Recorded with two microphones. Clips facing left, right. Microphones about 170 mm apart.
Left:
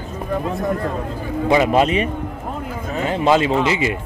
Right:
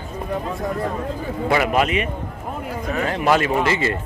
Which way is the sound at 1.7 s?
30° left (ahead or behind).